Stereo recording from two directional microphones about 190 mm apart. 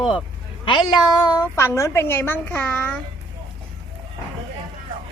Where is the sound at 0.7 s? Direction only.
25° left (ahead or behind).